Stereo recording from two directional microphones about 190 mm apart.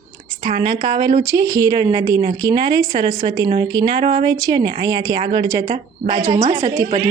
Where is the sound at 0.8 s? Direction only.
20° right (ahead or behind).